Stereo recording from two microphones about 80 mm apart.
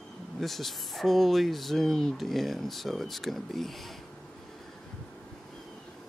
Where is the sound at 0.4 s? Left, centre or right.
Centre.